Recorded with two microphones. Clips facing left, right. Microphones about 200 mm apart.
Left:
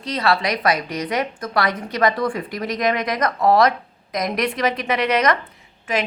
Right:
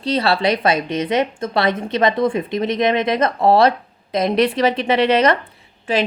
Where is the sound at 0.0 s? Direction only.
30° right (ahead or behind).